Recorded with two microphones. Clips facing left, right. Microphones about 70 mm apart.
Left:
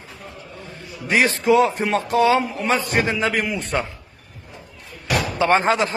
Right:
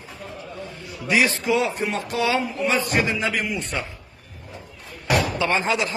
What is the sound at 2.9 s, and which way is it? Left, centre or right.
Speech, left.